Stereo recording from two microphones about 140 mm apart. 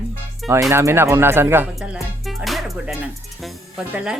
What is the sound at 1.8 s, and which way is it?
Speech, centre (ahead or behind).